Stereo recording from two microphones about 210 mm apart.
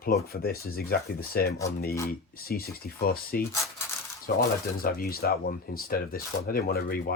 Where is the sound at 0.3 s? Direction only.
45° left (ahead or behind).